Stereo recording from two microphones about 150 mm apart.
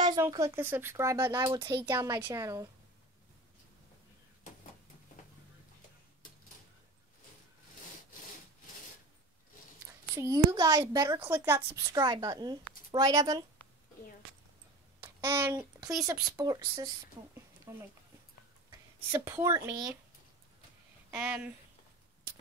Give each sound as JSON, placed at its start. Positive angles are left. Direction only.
{"t": 0.2, "sound": "a woman's voice", "side_deg": -20}
{"t": 10.1, "sound": "a woman's voice", "side_deg": -25}
{"t": 15.0, "sound": "a sound", "side_deg": -20}
{"t": 16.1, "sound": "a woman's voice", "side_deg": -20}
{"t": 19.1, "sound": "a woman's voice", "side_deg": -15}
{"t": 21.1, "sound": "speech", "side_deg": -10}